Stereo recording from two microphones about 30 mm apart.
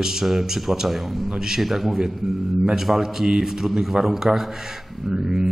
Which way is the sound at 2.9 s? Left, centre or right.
Right.